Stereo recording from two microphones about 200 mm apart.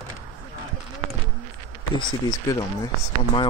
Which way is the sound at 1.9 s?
20° left (ahead or behind).